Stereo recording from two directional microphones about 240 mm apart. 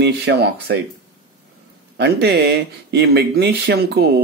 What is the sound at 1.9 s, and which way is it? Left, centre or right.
Speech, right.